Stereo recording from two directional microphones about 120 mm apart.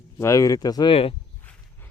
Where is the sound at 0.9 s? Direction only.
50° left (ahead or behind).